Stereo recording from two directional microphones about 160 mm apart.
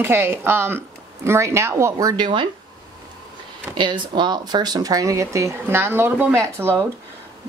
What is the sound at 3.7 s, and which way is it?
Speech, 30° right (ahead or behind).